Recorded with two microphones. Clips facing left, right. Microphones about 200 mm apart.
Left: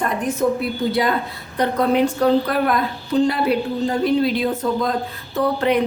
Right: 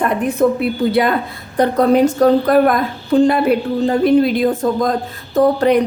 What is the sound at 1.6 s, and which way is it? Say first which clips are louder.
A woman's voice: right 5 dB; 45° right (ahead or behind).